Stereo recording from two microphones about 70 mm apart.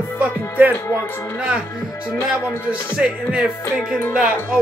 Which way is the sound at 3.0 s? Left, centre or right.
Centre.